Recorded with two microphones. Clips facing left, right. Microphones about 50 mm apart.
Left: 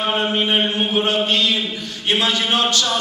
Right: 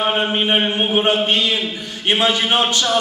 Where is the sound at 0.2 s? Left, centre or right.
Right.